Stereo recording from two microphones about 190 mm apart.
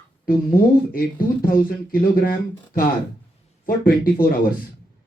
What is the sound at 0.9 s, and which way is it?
Speech, 50° left (ahead or behind).